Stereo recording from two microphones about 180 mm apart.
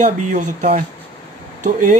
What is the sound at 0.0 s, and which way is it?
Speech, 40° right (ahead or behind).